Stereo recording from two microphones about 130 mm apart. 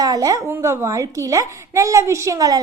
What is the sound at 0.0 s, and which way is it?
A woman's voice, 25° right (ahead or behind).